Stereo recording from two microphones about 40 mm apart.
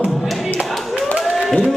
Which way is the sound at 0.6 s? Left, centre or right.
Centre.